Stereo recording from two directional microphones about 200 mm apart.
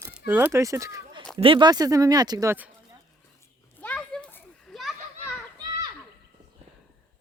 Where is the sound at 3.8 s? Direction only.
5° left (ahead or behind).